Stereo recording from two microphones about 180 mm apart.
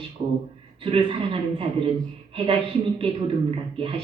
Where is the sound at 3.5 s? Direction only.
30° right (ahead or behind).